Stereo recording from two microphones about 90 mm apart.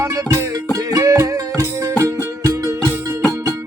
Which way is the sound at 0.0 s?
35° right (ahead or behind).